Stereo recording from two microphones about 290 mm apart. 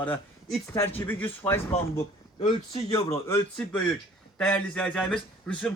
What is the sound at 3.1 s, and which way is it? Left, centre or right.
A man's voice, centre.